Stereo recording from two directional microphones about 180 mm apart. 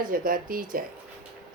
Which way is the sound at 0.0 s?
50° right (ahead or behind).